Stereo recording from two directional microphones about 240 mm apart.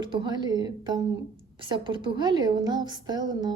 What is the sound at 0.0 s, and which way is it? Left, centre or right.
Speech, centre.